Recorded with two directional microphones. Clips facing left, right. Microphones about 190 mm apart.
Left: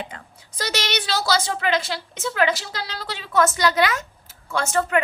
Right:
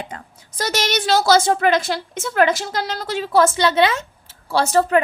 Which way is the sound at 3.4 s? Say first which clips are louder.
Right 1 dB; 30° right (ahead or behind).